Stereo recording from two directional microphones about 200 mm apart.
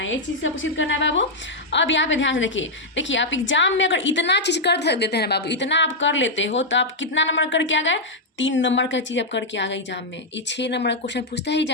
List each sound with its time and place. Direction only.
0.0 s a woman's voice: 70° left (ahead or behind)